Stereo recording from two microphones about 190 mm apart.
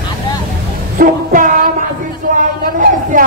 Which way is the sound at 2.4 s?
45° right (ahead or behind).